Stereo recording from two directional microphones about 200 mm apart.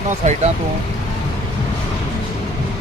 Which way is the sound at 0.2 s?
35° right (ahead or behind).